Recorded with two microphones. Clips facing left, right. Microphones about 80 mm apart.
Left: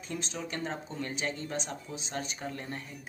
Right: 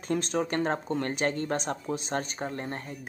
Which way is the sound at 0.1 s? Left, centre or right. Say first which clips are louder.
Right 10 dB; right.